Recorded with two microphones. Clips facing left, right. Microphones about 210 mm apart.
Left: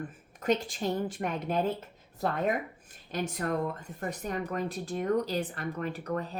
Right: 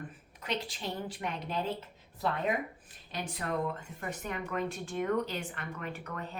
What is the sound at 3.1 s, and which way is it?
Speech, 45° left (ahead or behind).